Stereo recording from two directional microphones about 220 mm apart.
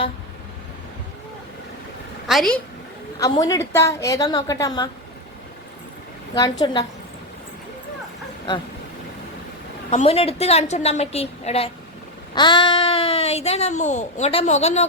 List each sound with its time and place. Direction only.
2.2 s a woman's voice: centre (ahead or behind)
3.2 s a woman's voice: 15° left (ahead or behind)
6.3 s a child's voice: 20° left (ahead or behind)
9.9 s a child's voice: 25° left (ahead or behind)